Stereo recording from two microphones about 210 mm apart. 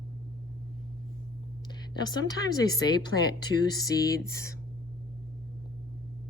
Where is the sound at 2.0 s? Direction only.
20° left (ahead or behind).